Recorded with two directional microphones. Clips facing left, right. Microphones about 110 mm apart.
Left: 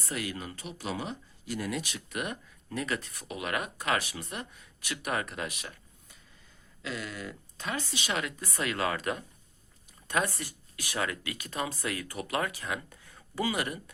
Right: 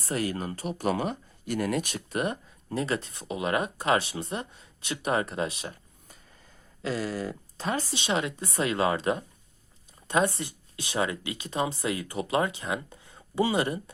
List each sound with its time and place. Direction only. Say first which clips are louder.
0.0 s speech: right 6 dB; 40° right (ahead or behind)
2.0 s speech: right 6 dB; 35° right (ahead or behind)
6.8 s speech: right 7 dB; 35° right (ahead or behind)